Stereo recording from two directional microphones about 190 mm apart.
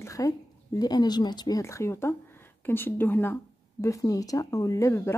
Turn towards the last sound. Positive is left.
turn(degrees=15)  # may be behind; listen again after turning